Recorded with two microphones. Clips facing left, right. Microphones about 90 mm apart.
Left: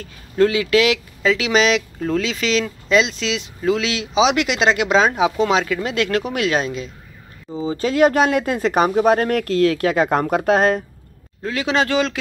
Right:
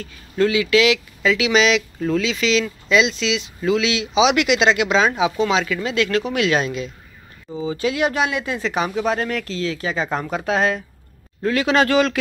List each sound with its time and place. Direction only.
0.0 s speech: 40° left (ahead or behind)
11.4 s a man's voice: 15° left (ahead or behind)